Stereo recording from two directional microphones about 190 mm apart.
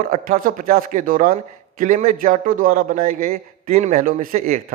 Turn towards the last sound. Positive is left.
turn(degrees=-45)  # may be behind; listen again after turning